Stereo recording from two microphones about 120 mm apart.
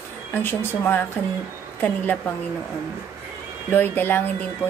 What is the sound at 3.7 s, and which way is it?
Speech, 15° left (ahead or behind).